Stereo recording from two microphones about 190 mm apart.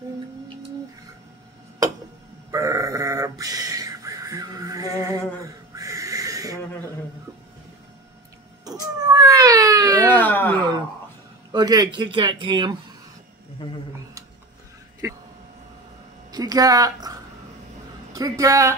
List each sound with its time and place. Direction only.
2.5 s a sound: 15° right (ahead or behind)
9.1 s cat: 20° right (ahead or behind)
10.0 s a sound: 10° left (ahead or behind)
11.5 s speech: 20° right (ahead or behind)
15.0 s speech: 15° right (ahead or behind)
16.3 s a woman's voice: 20° right (ahead or behind)